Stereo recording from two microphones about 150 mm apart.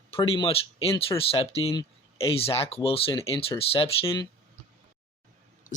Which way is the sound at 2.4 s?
40° left (ahead or behind).